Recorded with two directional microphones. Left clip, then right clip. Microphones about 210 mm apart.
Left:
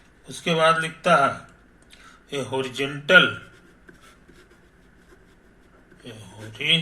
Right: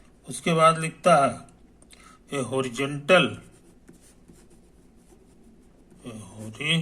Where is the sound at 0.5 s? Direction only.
15° right (ahead or behind).